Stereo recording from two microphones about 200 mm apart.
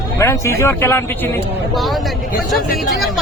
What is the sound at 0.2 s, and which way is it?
Speech, 15° left (ahead or behind).